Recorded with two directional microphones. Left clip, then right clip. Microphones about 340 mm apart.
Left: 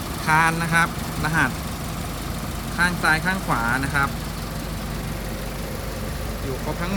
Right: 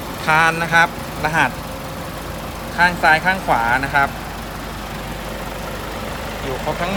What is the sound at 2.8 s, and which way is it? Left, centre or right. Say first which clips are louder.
Speech: right 6 dB; centre.